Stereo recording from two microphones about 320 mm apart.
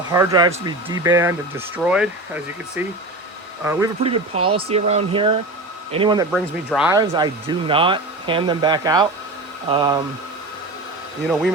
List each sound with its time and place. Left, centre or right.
0.1 s speech: centre
6.3 s speech: centre